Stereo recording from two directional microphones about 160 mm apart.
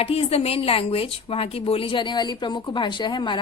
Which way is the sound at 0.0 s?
40° left (ahead or behind).